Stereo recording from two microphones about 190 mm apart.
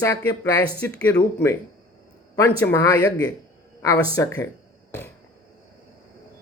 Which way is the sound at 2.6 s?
15° left (ahead or behind).